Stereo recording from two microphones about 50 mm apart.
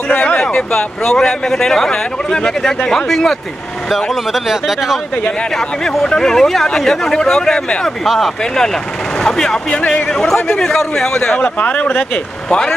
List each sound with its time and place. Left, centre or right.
0.6 s speech: centre
3.9 s speech: centre
6.0 s speech: centre
8.0 s speech: centre
9.2 s speech: centre
9.8 s a man's voice: left
10.1 s speech: centre
11.3 s a man's voice: left
12.4 s speech: centre